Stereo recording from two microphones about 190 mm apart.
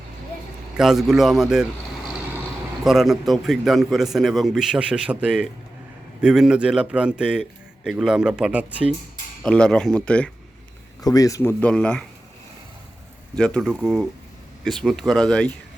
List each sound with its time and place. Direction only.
0.8 s a man's voice: centre (ahead or behind)
2.8 s a man's voice: centre (ahead or behind)
11.0 s speech: 20° left (ahead or behind)
11.6 s a man's voice: 5° left (ahead or behind)
13.3 s a man's voice: 5° left (ahead or behind)